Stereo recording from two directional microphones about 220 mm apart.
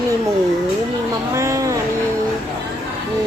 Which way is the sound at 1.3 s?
15° right (ahead or behind).